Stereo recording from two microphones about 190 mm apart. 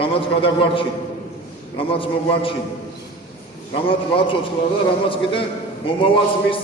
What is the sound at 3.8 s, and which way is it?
A man's voice, 30° left (ahead or behind).